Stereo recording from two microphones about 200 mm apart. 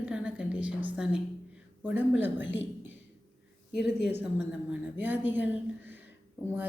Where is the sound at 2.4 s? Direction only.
65° left (ahead or behind).